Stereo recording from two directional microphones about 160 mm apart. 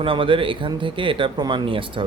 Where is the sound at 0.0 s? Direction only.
35° right (ahead or behind).